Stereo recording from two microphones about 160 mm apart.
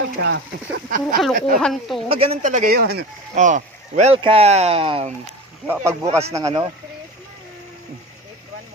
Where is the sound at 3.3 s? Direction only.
50° right (ahead or behind).